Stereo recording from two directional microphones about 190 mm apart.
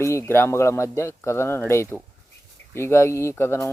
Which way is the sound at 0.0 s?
15° left (ahead or behind).